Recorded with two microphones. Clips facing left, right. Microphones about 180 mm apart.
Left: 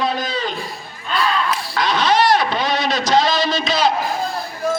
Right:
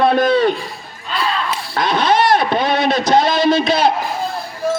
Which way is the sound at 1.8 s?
55° right (ahead or behind).